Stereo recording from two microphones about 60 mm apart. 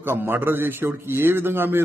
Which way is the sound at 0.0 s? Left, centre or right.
Right.